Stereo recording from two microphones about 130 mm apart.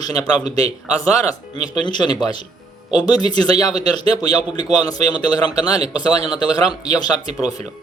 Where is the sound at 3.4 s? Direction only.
30° left (ahead or behind).